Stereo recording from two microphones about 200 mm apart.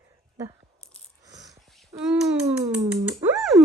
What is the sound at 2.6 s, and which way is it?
Speech, 15° right (ahead or behind).